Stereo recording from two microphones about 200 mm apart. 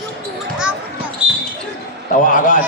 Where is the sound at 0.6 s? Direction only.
5° right (ahead or behind).